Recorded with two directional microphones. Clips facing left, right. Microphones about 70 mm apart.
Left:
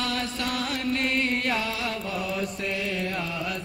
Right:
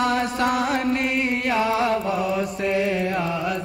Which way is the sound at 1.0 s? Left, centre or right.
Centre.